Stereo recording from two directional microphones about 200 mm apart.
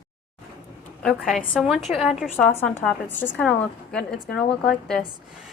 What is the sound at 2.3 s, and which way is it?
A woman's voice, 10° left (ahead or behind).